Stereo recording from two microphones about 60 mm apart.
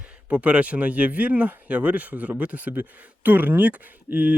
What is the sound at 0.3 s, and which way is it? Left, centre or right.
Speech, right.